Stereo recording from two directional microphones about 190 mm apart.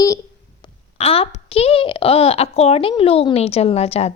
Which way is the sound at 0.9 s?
30° left (ahead or behind).